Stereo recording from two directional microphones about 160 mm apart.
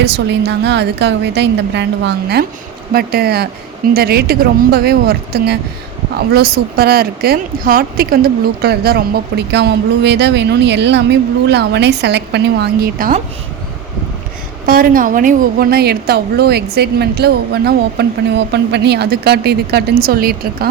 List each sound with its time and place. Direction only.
0.0 s speech: 90° right
2.9 s a woman's voice: 75° right (ahead or behind)
14.7 s a woman's voice: 65° right (ahead or behind)